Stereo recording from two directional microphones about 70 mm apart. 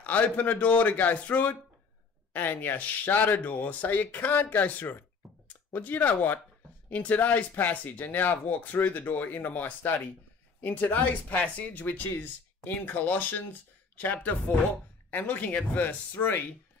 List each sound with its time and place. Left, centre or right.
0.0 s speech: left
5.2 s a sound: centre
5.7 s speech: left